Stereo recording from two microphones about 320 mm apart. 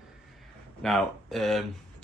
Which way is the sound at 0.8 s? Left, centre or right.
Centre.